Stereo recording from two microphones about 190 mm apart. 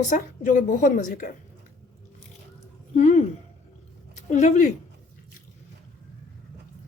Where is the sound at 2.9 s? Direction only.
35° left (ahead or behind).